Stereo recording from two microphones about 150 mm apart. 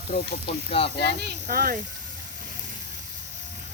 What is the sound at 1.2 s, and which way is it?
Speech, 75° right (ahead or behind).